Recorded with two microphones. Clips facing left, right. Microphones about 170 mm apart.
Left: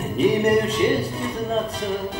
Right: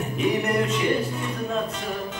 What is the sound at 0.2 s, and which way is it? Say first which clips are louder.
Speech: left 5 dB; 35° left (ahead or behind).